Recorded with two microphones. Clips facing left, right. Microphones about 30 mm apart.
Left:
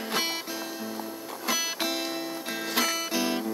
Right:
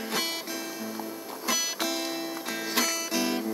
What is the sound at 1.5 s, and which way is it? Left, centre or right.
Music, centre.